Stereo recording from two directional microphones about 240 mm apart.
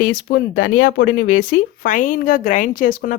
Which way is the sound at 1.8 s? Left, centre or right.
Left.